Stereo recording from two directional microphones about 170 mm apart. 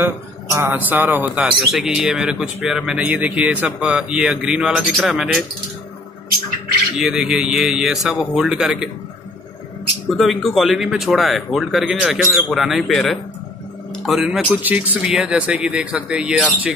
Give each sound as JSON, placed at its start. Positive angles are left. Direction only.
{"t": 0.0, "sound": "speech", "side_deg": -15}
{"t": 7.0, "sound": "speech", "side_deg": -5}
{"t": 10.0, "sound": "speech", "side_deg": 0}